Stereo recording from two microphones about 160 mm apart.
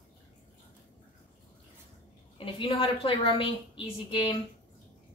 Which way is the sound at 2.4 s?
35° left (ahead or behind).